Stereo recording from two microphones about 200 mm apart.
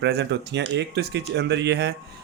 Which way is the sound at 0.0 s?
60° right (ahead or behind).